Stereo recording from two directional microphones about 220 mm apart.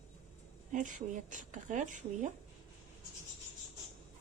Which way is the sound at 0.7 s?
35° right (ahead or behind).